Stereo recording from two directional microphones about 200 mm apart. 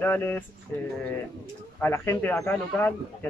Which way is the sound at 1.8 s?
10° left (ahead or behind).